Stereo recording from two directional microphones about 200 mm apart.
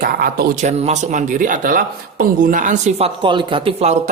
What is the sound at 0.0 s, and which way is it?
Speech, 50° right (ahead or behind).